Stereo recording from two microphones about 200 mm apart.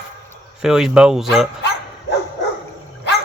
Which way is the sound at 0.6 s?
5° right (ahead or behind).